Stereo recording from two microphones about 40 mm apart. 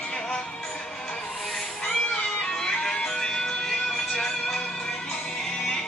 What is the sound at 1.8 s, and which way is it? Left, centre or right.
Music, left.